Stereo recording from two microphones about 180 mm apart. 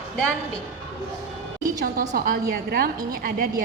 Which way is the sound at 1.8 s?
55° right (ahead or behind).